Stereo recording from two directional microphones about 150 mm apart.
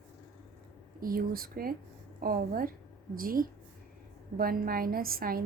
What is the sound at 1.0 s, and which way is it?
A woman's voice, 75° right (ahead or behind).